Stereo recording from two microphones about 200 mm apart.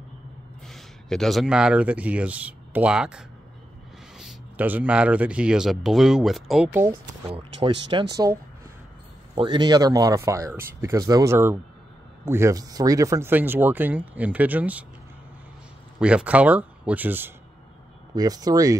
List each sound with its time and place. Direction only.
0.7 s speech: centre (ahead or behind)
7.2 s speech: 30° right (ahead or behind)
7.9 s speech: 20° right (ahead or behind)
16.0 s speech: 5° right (ahead or behind)